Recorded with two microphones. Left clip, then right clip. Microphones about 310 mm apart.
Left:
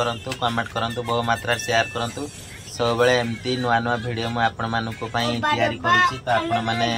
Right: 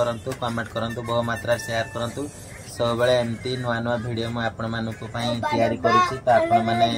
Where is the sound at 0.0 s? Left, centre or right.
Left.